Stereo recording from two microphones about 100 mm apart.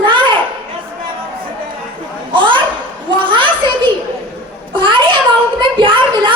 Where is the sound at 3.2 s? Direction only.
55° right (ahead or behind).